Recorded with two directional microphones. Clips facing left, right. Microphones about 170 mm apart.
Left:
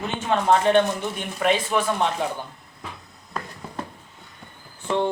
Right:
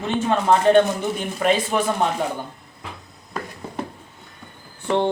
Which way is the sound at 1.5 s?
40° right (ahead or behind).